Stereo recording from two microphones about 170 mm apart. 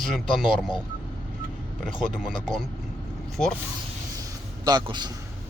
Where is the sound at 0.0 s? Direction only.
Centre (ahead or behind).